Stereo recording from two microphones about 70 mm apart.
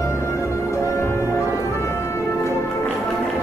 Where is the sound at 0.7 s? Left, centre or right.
Left.